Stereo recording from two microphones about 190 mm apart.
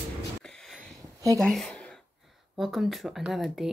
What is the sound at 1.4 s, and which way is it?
Speech, 5° left (ahead or behind).